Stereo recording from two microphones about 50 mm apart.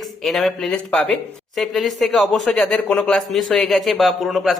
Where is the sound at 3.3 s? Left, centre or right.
Centre.